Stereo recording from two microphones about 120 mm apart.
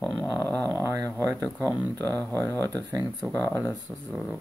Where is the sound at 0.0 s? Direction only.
Centre (ahead or behind).